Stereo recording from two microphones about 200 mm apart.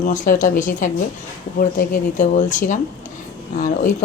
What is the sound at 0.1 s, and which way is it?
A woman's voice, 40° left (ahead or behind).